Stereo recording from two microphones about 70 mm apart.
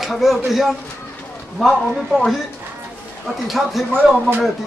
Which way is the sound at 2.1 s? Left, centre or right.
Centre.